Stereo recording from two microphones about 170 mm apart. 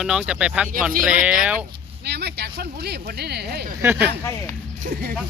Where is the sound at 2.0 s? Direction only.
75° right (ahead or behind).